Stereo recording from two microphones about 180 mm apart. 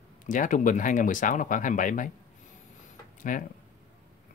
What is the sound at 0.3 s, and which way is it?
Speech, 45° left (ahead or behind).